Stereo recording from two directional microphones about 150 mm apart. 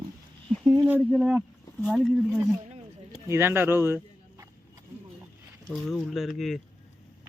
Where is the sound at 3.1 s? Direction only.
15° right (ahead or behind).